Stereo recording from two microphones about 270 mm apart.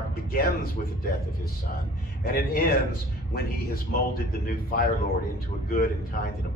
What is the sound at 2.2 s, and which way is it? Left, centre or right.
A man's voice, left.